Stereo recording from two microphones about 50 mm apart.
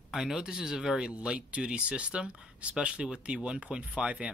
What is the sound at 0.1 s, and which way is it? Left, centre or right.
Speech, centre.